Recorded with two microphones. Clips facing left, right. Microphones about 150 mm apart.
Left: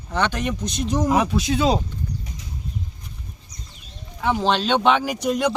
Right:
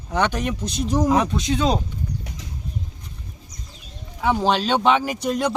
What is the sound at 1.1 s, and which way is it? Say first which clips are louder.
Speech: even; 5° left (ahead or behind).